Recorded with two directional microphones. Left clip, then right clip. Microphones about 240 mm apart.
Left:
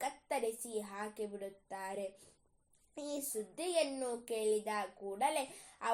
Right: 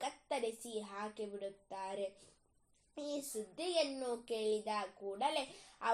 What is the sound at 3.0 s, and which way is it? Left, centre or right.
A woman's voice, left.